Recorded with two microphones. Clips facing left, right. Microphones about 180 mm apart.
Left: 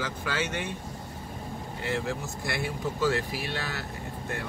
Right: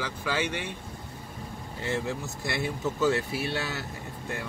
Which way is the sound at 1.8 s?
20° right (ahead or behind).